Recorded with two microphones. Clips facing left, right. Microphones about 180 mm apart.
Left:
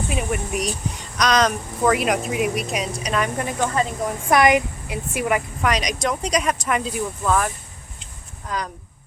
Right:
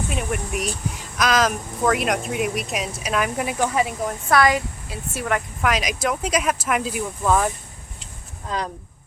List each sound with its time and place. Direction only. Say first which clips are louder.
0.1 s speech: left 2 dB; centre (ahead or behind)
4.3 s a woman's voice: left 2 dB; 20° left (ahead or behind)
5.6 s speech: even; 5° right (ahead or behind)
7.3 s speech: right 2 dB; 20° right (ahead or behind)